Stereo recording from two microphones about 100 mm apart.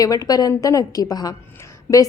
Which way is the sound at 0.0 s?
35° left (ahead or behind).